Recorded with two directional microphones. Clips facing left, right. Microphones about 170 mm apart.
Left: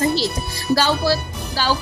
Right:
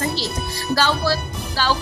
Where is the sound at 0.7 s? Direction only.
15° left (ahead or behind).